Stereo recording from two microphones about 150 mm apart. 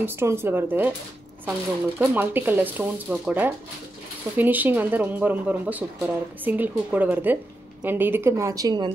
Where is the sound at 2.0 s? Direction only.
15° right (ahead or behind).